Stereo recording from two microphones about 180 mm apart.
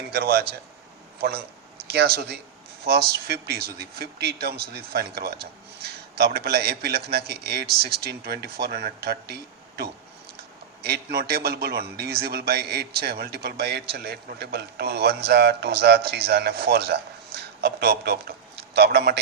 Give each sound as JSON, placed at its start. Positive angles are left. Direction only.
{"t": 0.1, "sound": "a man's voice", "side_deg": -60}
{"t": 1.9, "sound": "a man's voice", "side_deg": -65}